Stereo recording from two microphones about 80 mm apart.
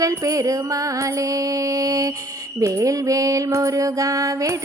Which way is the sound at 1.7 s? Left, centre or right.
Right.